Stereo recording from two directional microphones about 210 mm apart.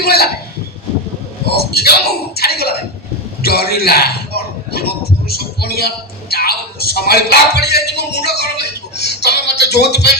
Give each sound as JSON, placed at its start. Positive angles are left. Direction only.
{"t": 0.0, "sound": "a man's voice", "side_deg": 50}
{"t": 1.5, "sound": "a man's voice", "side_deg": 50}